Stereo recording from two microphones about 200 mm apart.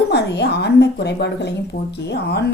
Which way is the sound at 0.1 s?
55° left (ahead or behind).